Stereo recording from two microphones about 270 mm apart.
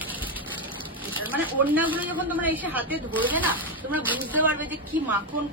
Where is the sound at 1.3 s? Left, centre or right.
Centre.